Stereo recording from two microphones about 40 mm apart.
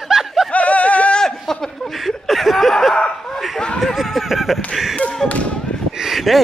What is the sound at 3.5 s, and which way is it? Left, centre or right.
Speech, centre.